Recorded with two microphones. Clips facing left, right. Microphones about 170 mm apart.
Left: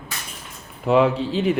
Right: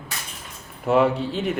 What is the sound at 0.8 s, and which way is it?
Speech, centre (ahead or behind).